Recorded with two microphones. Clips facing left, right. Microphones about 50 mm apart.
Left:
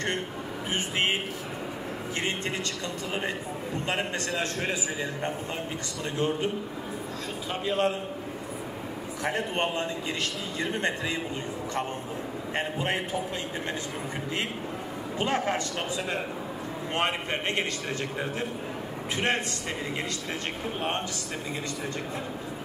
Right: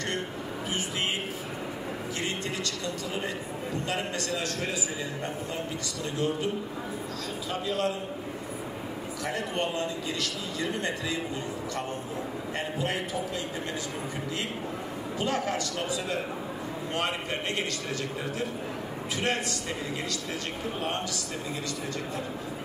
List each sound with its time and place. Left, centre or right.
0.7 s a sound: left
3.7 s a man's voice: left
6.1 s a man's voice: left
7.6 s a man's voice: left
9.2 s a man's voice: left
12.5 s a man's voice: left
15.1 s a man's voice: left
16.9 s a man's voice: left
19.1 s a man's voice: left